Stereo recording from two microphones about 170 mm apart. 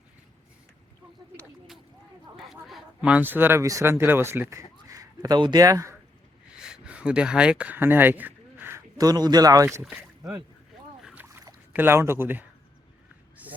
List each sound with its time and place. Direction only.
2.4 s speech: centre (ahead or behind); by 5.9 s 20° right (ahead or behind)
6.6 s speech: 5° right (ahead or behind); by 9.6 s 20° right (ahead or behind)
9.8 s speech: 5° right (ahead or behind)
11.0 s rowboat: 10° right (ahead or behind)
13.4 s a sound: 10° right (ahead or behind)